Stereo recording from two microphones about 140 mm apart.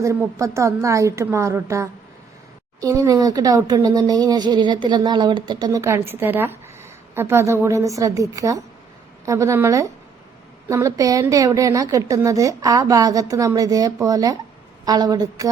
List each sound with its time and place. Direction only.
0.0 s speech: 20° right (ahead or behind)